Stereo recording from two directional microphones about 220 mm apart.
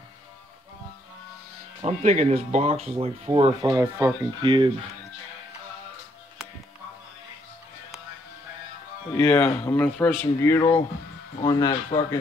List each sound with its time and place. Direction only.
1.8 s speech: 30° right (ahead or behind)
3.6 s speech: 15° right (ahead or behind)
9.1 s speech: 10° left (ahead or behind)